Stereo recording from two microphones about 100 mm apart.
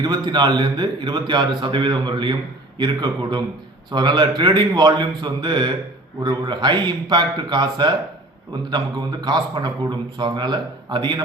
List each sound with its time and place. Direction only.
0.0 s a man's voice: 45° right (ahead or behind)